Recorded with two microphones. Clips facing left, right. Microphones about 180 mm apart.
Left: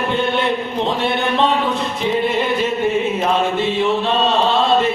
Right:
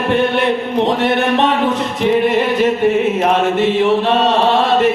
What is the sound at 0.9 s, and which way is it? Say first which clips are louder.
Chant: right 3 dB; 75° right (ahead or behind).